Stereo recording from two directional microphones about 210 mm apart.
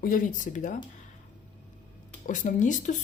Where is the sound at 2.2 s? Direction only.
35° left (ahead or behind).